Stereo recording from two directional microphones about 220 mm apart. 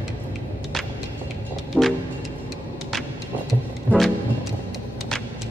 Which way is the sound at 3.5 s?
Centre (ahead or behind).